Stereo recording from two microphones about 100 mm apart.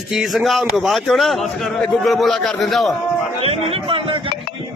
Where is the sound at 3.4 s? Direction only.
75° right (ahead or behind).